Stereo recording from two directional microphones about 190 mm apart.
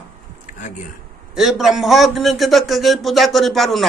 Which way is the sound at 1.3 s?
Centre (ahead or behind).